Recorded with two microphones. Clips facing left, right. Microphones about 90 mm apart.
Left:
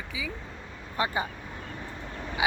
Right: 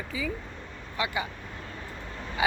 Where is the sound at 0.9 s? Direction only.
35° left (ahead or behind).